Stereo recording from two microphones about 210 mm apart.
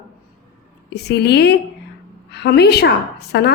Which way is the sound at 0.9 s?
50° left (ahead or behind).